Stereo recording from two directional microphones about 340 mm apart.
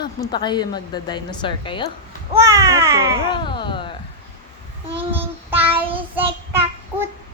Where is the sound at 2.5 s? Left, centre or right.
Centre.